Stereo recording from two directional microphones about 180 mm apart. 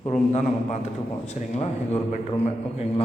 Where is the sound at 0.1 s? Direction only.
40° left (ahead or behind).